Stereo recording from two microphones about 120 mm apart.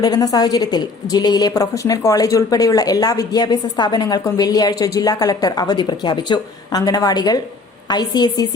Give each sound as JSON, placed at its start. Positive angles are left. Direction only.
{"t": 0.0, "sound": "a woman's voice", "side_deg": 30}